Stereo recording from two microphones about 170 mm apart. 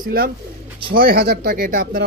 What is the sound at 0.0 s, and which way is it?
Speech, 60° right (ahead or behind).